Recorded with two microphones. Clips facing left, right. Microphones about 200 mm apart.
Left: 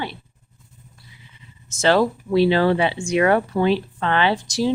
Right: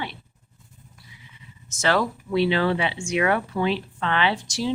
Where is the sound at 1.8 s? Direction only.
30° left (ahead or behind).